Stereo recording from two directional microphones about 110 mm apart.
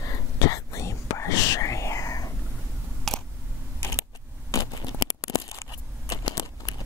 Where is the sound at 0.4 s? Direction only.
30° left (ahead or behind).